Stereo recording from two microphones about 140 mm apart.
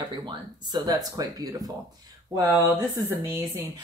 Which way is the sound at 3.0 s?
15° right (ahead or behind).